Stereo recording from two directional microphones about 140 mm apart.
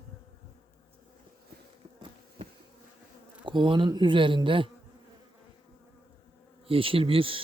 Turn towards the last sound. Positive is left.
turn(degrees=-40)  # may be behind; listen again after turning